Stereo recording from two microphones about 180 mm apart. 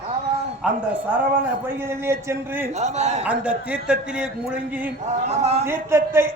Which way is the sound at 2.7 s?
40° right (ahead or behind).